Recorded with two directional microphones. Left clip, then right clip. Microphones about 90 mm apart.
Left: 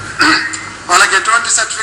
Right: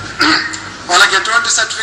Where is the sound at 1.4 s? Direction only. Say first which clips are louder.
Right 1 dB; 20° right (ahead or behind).